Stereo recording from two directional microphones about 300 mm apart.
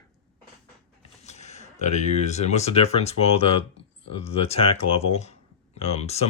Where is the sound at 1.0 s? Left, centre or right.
Left.